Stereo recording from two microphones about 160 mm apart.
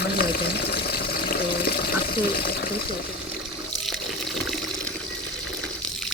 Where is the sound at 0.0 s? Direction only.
80° left.